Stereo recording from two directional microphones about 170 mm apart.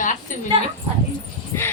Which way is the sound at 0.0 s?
50° left (ahead or behind).